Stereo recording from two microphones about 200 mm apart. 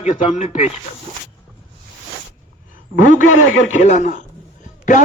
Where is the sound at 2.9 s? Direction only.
40° left (ahead or behind).